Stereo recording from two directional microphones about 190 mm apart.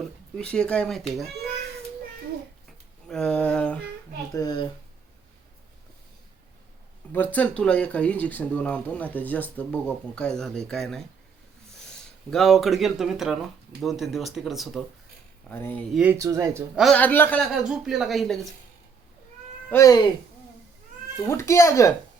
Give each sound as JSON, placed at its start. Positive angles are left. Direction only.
{"t": 0.3, "sound": "speech", "side_deg": 5}
{"t": 3.1, "sound": "speech", "side_deg": 5}
{"t": 4.3, "sound": "speech", "side_deg": 20}
{"t": 7.1, "sound": "speech", "side_deg": 10}
{"t": 12.3, "sound": "speech", "side_deg": 0}
{"t": 15.4, "sound": "speech", "side_deg": 10}
{"t": 16.0, "sound": "speech", "side_deg": -15}
{"t": 16.7, "sound": "speech", "side_deg": 0}
{"t": 17.5, "sound": "speech", "side_deg": -5}
{"t": 19.7, "sound": "speech", "side_deg": 20}
{"t": 21.2, "sound": "speech", "side_deg": 15}